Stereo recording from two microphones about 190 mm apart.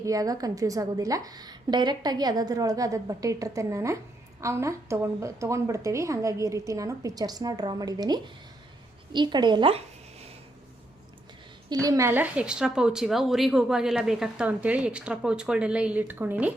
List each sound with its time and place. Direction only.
0.0 s a woman's voice: 20° right (ahead or behind)
11.7 s a woman's voice: 20° right (ahead or behind)